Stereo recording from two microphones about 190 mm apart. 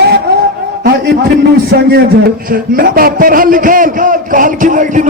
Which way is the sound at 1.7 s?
55° right (ahead or behind).